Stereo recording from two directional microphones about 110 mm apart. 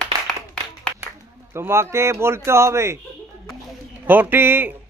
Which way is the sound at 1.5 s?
25° right (ahead or behind).